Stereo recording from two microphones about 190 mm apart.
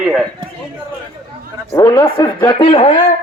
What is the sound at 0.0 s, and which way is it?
Speech, centre (ahead or behind).